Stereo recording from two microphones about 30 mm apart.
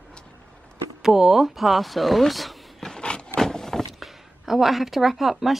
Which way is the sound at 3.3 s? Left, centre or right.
Centre.